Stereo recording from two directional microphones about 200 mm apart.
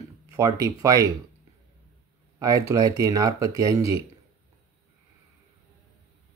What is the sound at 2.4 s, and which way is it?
Speech, 15° right (ahead or behind).